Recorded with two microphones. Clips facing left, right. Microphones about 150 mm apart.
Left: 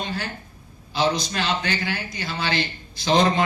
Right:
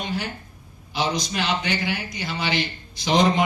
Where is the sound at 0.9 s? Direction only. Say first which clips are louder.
Left 2 dB; 15° right (ahead or behind).